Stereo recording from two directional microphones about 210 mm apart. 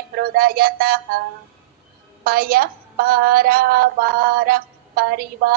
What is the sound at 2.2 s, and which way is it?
A woman's voice, 45° right (ahead or behind).